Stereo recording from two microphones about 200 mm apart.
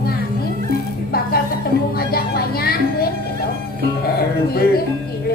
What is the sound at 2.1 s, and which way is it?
Vehicle, 50° left (ahead or behind).